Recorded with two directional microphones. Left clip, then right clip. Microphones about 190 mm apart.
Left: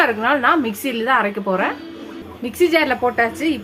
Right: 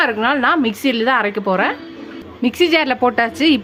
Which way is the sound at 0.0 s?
30° right (ahead or behind).